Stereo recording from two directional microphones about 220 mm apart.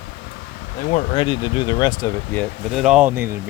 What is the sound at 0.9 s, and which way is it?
Speech, 25° left (ahead or behind).